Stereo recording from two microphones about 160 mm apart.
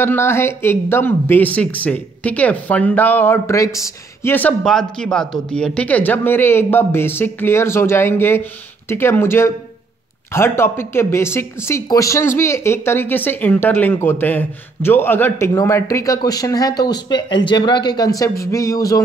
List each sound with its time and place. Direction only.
0.0 s speech: 15° left (ahead or behind)